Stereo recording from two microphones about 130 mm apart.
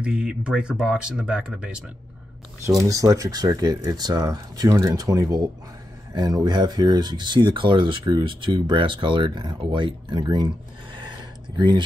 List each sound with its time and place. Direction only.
0.0 s speech: 5° right (ahead or behind)
2.8 s speech: 25° right (ahead or behind)
11.1 s a sound: 35° right (ahead or behind)